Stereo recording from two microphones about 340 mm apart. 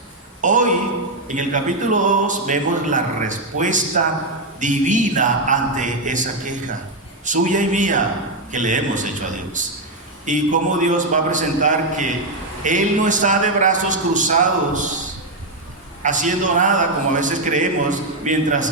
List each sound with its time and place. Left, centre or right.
0.4 s a sound: right
1.3 s speech: right
16.0 s speech: right